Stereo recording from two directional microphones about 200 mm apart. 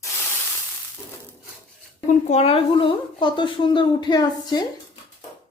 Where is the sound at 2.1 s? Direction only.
35° left (ahead or behind).